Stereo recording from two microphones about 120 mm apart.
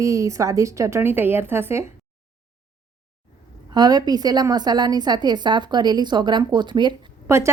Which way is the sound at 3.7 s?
35° right (ahead or behind).